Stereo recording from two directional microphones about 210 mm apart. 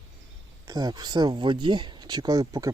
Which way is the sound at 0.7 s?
20° right (ahead or behind).